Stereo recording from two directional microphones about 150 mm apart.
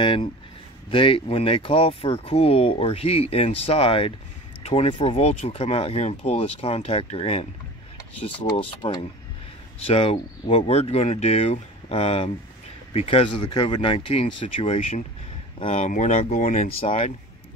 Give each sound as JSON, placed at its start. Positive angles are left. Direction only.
{"t": 0.0, "sound": "speech", "side_deg": 35}
{"t": 15.6, "sound": "speech", "side_deg": 55}
{"t": 16.8, "sound": "speech", "side_deg": 40}